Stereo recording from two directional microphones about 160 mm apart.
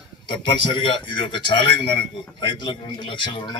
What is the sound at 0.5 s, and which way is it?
A man's voice, 30° left (ahead or behind).